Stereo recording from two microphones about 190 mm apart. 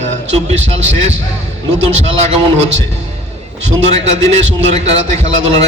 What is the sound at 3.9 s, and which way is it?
A man's voice, 35° right (ahead or behind).